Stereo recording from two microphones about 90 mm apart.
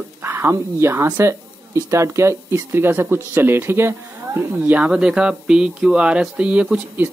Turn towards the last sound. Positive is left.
turn(degrees=-15)  # may be behind; listen again after turning